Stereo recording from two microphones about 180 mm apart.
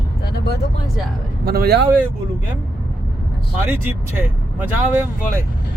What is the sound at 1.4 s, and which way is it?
Speech, 60° right (ahead or behind).